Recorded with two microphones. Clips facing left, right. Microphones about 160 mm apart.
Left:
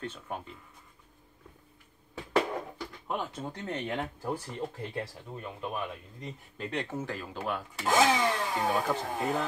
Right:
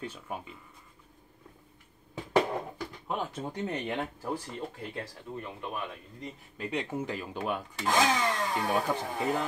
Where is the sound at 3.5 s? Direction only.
10° right (ahead or behind).